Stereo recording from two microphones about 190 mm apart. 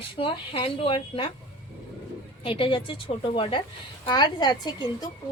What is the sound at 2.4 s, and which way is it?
A woman's voice, 30° left (ahead or behind).